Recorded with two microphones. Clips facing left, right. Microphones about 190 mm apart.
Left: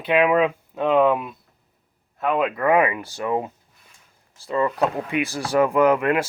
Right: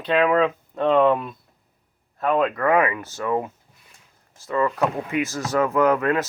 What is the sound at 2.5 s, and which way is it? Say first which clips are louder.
Speech: left 1 dB; 15° left (ahead or behind).